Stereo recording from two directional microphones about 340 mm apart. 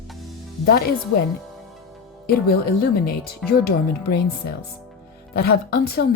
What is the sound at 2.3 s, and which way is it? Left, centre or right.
Speech, left.